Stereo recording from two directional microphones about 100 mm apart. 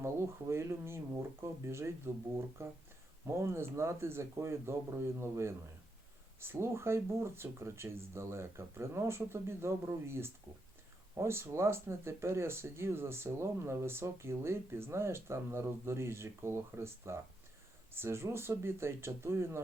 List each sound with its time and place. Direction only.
0.0 s speech: 30° right (ahead or behind)